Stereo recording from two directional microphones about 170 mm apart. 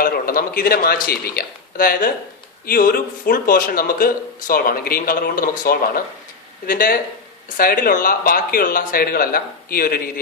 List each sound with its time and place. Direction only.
0.0 s a man's voice: 60° left (ahead or behind)